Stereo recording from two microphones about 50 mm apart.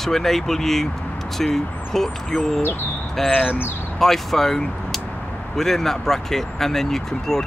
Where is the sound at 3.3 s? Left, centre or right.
Centre.